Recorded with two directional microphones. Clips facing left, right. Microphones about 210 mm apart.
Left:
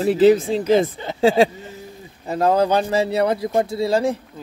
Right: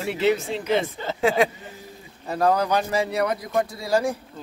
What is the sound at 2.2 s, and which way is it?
Speech, 25° left (ahead or behind).